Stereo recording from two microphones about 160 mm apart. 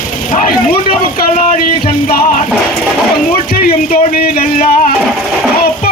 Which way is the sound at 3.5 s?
70° left (ahead or behind).